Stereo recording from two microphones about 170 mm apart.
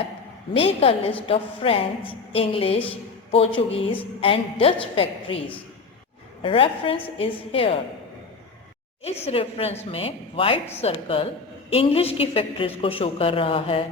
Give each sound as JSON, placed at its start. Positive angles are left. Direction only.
{"t": 0.5, "sound": "a woman's voice", "side_deg": 35}
{"t": 6.4, "sound": "a woman's voice", "side_deg": 30}
{"t": 9.0, "sound": "a woman's voice", "side_deg": 35}